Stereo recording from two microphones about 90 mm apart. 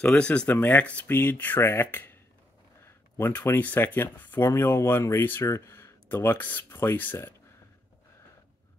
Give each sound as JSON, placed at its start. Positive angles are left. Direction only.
{"t": 0.0, "sound": "speech", "side_deg": 15}